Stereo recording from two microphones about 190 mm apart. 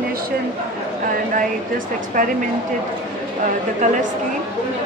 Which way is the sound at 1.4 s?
45° right (ahead or behind).